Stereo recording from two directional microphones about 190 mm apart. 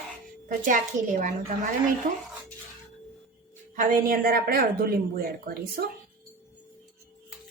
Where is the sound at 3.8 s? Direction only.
45° right (ahead or behind).